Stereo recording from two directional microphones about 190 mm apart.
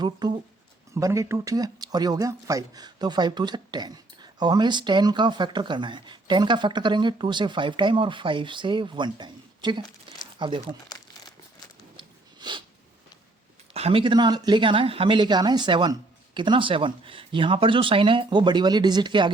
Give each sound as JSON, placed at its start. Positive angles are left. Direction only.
{"t": 0.0, "sound": "speech", "side_deg": -20}
{"t": 11.9, "sound": "a sound", "side_deg": -25}
{"t": 13.7, "sound": "speech", "side_deg": -30}